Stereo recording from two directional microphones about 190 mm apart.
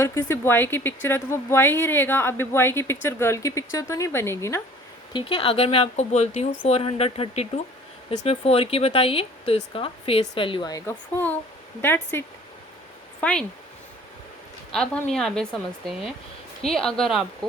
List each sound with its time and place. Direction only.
0.0 s speech: 15° left (ahead or behind)
5.1 s speech: 30° left (ahead or behind); by 12.2 s 10° left (ahead or behind)
13.2 s speech: 10° left (ahead or behind)
14.7 s a woman's voice: 5° left (ahead or behind)